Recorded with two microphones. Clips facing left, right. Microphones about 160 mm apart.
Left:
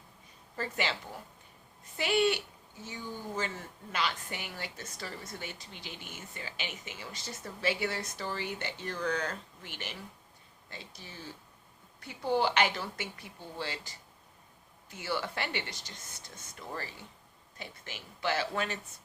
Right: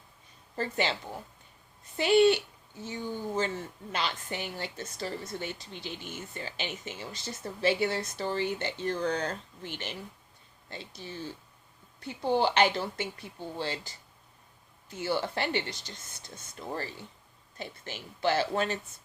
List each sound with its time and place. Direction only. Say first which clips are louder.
0.5 s a woman's voice: right 4 dB; 30° right (ahead or behind)
2.0 s a woman's voice: right 6 dB; 30° right (ahead or behind)